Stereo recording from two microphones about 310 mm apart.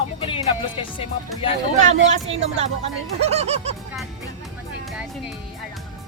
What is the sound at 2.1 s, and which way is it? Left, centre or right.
Speech, centre.